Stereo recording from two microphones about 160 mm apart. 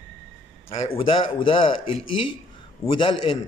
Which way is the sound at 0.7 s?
35° left (ahead or behind).